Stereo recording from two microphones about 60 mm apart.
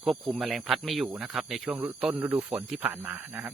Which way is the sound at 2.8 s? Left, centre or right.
Right.